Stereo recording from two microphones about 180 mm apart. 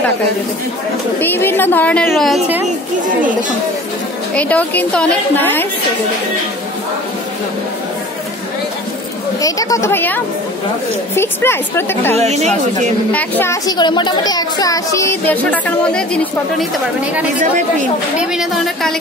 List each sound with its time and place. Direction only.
1.2 s a woman's voice: 10° left (ahead or behind)
4.4 s a woman's voice: 10° left (ahead or behind)
9.4 s a woman's voice: 20° left (ahead or behind)
12.2 s speech: 40° right (ahead or behind)
13.1 s a woman's voice: 10° left (ahead or behind)
18.3 s a woman's voice: centre (ahead or behind)